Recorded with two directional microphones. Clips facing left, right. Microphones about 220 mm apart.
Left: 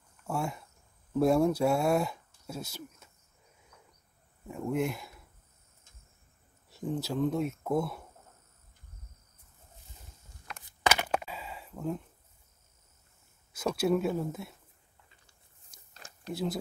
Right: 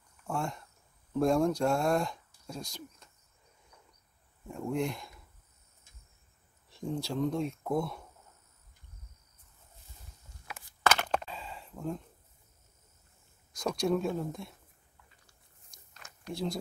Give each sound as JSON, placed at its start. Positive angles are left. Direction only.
{"t": 0.3, "sound": "speech", "side_deg": 5}
{"t": 4.5, "sound": "speech", "side_deg": 5}
{"t": 6.7, "sound": "speech", "side_deg": 5}
{"t": 10.8, "sound": "a sound", "side_deg": 10}
{"t": 13.5, "sound": "speech", "side_deg": 5}
{"t": 15.9, "sound": "a sound", "side_deg": 30}